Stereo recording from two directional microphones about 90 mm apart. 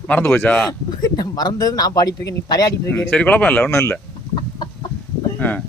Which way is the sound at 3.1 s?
15° left (ahead or behind).